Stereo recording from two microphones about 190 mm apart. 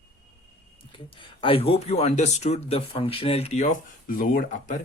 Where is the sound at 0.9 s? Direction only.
25° left (ahead or behind).